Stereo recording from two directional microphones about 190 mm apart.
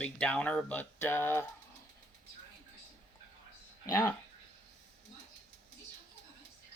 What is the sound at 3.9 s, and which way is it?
Speech, 15° left (ahead or behind).